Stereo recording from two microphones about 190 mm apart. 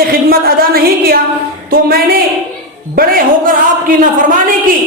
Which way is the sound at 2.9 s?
50° right (ahead or behind).